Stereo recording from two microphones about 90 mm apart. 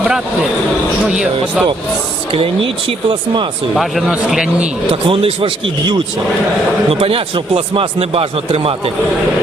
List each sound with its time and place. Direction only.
1.1 s speech: 10° right (ahead or behind)
3.8 s speech: centre (ahead or behind)
4.9 s speech: 90° right
7.0 s speech: 90° right